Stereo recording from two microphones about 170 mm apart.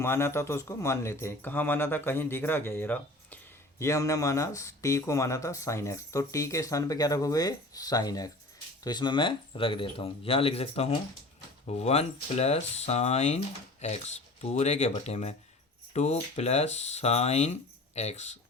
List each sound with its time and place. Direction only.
0.0 s a man's voice: 15° left (ahead or behind); by 18.3 s 40° left (ahead or behind)